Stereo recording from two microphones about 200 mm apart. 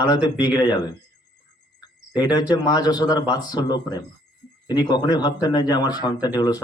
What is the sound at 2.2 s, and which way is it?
A man's voice, 20° left (ahead or behind).